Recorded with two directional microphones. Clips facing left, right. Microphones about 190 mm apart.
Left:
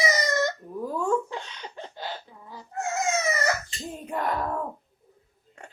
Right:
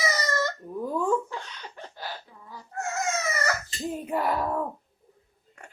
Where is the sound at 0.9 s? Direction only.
Centre (ahead or behind).